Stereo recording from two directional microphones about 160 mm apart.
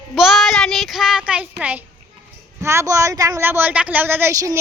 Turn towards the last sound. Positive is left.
turn(degrees=-20)  # may be behind; listen again after turning